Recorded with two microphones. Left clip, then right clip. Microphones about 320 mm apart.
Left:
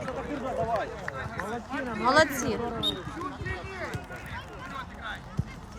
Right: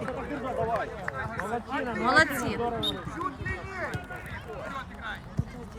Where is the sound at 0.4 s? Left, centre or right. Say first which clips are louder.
Even; left.